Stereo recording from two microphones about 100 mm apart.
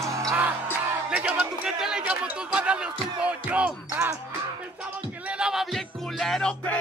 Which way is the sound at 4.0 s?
30° right (ahead or behind).